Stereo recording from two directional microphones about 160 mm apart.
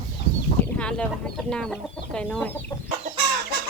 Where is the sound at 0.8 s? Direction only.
5° left (ahead or behind).